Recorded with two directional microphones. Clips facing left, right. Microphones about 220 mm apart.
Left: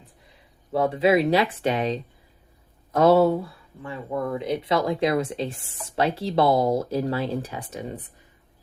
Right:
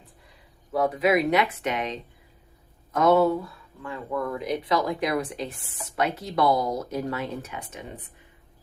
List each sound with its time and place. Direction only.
0.7 s speech: 30° left (ahead or behind)